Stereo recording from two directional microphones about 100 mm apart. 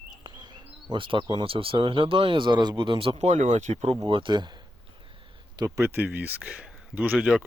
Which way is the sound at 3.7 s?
75° right (ahead or behind).